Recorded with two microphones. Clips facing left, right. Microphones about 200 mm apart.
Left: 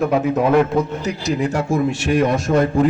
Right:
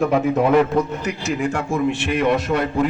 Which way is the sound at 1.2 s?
40° left (ahead or behind).